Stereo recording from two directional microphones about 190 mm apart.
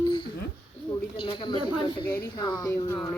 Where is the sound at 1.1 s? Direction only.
25° left (ahead or behind).